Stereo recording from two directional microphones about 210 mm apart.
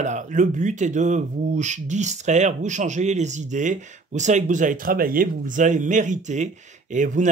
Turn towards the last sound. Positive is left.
turn(degrees=-35)  # may be behind; listen again after turning